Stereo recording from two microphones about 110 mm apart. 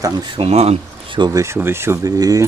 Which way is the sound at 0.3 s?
65° right (ahead or behind).